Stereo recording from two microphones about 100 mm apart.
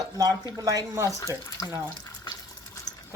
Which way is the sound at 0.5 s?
35° right (ahead or behind).